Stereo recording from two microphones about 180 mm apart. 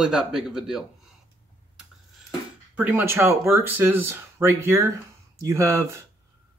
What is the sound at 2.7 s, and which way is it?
Speech, 10° right (ahead or behind).